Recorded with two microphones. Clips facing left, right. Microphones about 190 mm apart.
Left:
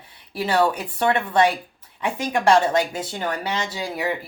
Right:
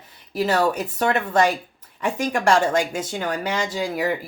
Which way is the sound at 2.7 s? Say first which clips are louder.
Even; 45° right (ahead or behind).